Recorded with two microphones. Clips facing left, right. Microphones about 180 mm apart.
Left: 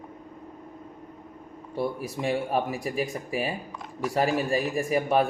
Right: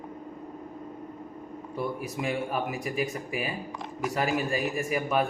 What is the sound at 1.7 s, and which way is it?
Speech, 35° left (ahead or behind).